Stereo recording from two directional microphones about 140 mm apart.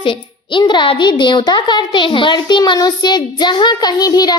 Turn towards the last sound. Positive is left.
turn(degrees=30)  # may be behind; listen again after turning